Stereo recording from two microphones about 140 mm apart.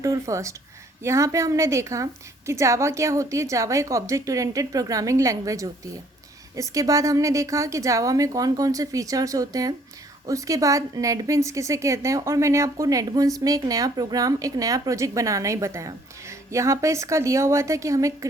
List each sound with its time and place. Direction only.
0.0 s a woman's voice: 20° right (ahead or behind)